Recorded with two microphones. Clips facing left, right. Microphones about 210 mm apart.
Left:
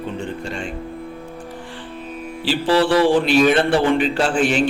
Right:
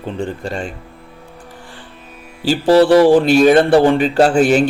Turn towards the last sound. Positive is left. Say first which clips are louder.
# right 7 dB
turn(degrees=-40)  # may be behind; listen again after turning